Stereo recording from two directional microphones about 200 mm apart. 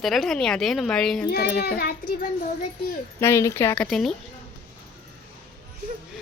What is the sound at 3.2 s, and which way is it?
Speech, 15° left (ahead or behind).